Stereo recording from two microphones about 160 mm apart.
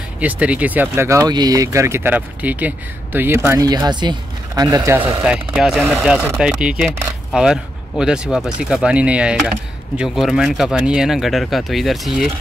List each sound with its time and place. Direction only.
0.2 s speech: 10° right (ahead or behind)
5.2 s speech: 5° right (ahead or behind)